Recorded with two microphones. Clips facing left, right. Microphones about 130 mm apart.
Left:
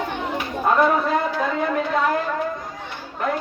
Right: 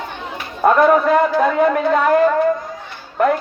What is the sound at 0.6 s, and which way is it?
A woman's voice, 60° right (ahead or behind).